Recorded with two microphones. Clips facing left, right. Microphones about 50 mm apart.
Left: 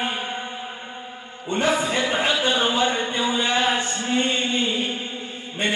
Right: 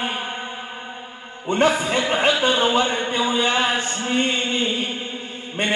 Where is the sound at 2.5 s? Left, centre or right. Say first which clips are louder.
Right 2 dB; right.